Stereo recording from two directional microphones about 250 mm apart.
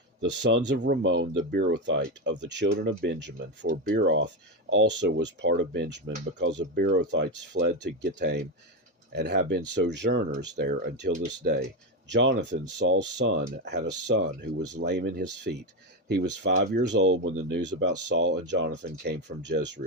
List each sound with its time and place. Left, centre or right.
0.2 s speech: right